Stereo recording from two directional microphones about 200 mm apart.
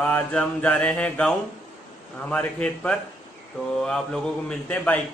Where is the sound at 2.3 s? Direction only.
5° left (ahead or behind).